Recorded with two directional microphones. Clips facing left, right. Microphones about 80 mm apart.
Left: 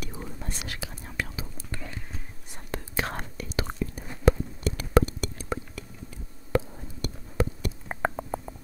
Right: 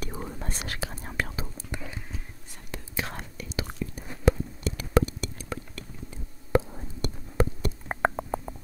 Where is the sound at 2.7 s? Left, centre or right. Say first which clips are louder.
Left 3 dB; left.